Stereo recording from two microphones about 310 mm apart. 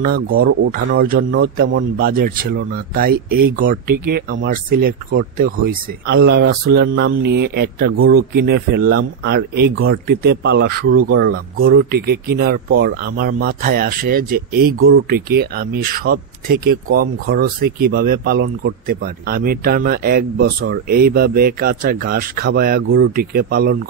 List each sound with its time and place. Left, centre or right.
0.4 s a man's voice: right